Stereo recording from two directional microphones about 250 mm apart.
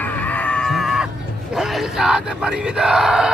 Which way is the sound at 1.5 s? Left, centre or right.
Centre.